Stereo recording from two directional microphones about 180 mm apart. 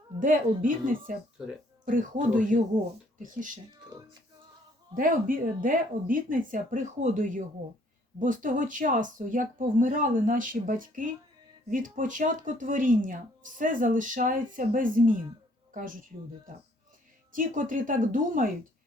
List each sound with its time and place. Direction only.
0.2 s speech: 45° right (ahead or behind)
3.7 s music: 20° right (ahead or behind)
4.9 s speech: 50° right (ahead or behind)
17.3 s speech: 50° right (ahead or behind)